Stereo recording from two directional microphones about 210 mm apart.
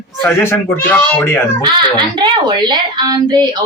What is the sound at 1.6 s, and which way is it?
A child's voice, 20° right (ahead or behind).